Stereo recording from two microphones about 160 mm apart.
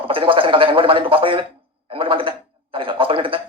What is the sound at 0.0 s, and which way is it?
Speech, 35° right (ahead or behind).